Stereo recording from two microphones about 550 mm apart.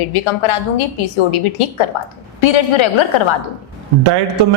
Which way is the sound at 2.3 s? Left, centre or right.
Left.